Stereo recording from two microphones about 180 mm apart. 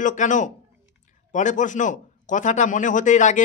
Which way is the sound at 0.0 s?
45° left (ahead or behind).